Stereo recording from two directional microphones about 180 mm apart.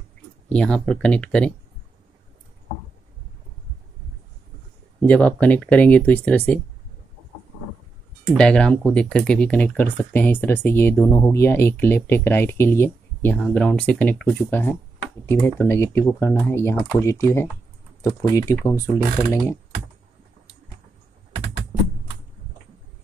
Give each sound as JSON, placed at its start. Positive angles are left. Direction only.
{"t": 0.5, "sound": "speech", "side_deg": 5}
{"t": 5.0, "sound": "speech", "side_deg": 10}
{"t": 8.3, "sound": "speech", "side_deg": 5}